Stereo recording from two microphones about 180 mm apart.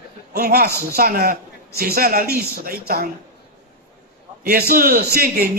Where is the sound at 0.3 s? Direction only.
60° right (ahead or behind).